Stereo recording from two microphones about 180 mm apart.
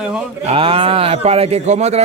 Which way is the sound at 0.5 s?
30° right (ahead or behind).